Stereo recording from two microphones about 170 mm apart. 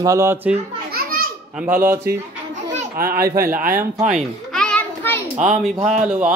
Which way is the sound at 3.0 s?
60° right (ahead or behind).